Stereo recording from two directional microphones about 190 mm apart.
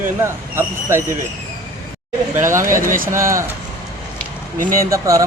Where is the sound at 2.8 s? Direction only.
45° right (ahead or behind).